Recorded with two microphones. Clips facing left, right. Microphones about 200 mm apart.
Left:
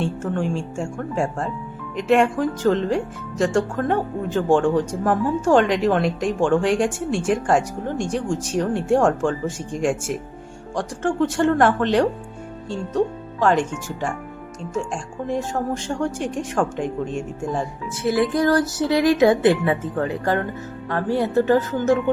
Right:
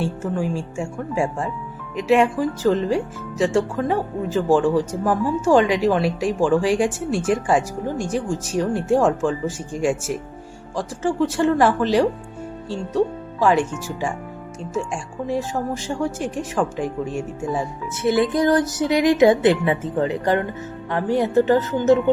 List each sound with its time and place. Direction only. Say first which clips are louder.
0.0 s speech: even; 5° right (ahead or behind)
10.8 s speech: even; 5° right (ahead or behind)
18.1 s speech: right 1 dB; 20° right (ahead or behind)